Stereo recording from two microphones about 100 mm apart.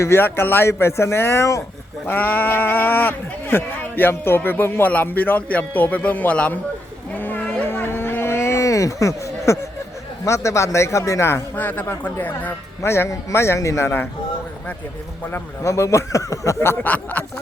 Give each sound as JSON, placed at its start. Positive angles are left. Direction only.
{"t": 0.0, "sound": "speech", "side_deg": 25}
{"t": 2.0, "sound": "speech", "side_deg": 20}
{"t": 7.2, "sound": "a sound", "side_deg": 20}
{"t": 10.2, "sound": "speech", "side_deg": 30}
{"t": 15.3, "sound": "speech", "side_deg": 30}